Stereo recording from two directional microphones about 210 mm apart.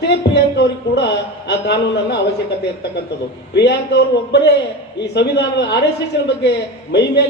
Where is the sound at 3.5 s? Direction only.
55° left (ahead or behind).